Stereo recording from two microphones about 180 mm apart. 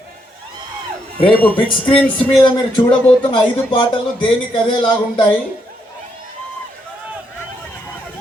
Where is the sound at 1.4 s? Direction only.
10° left (ahead or behind).